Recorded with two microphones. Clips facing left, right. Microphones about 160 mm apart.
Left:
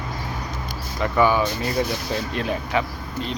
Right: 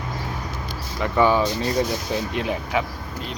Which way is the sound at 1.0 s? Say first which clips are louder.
Even; 30° right (ahead or behind).